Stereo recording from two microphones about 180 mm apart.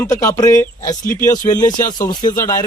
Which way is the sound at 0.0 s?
15° left (ahead or behind).